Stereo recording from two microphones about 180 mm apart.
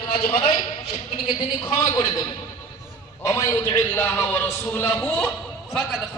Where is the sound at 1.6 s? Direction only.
25° left (ahead or behind).